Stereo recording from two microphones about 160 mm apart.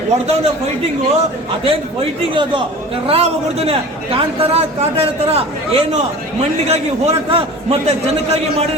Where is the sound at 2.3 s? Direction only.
30° right (ahead or behind).